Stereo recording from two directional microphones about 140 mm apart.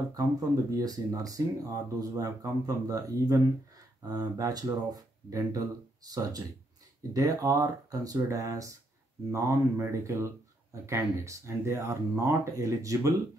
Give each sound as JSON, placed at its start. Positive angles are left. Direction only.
{"t": 0.7, "sound": "speech", "side_deg": -25}